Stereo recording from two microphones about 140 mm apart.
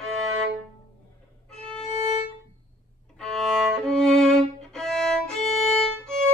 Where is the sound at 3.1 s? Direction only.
5° left (ahead or behind).